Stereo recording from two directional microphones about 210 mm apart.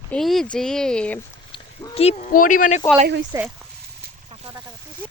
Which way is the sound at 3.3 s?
15° right (ahead or behind).